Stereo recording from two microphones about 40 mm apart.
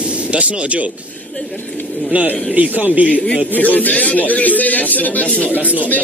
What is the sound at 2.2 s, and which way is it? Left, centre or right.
Speech, right.